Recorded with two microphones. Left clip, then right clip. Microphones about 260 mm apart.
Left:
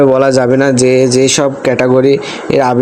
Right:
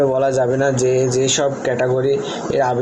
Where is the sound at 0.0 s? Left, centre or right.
Left.